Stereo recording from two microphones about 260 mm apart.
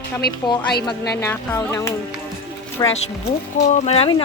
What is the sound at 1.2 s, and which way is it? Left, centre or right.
Speech, centre.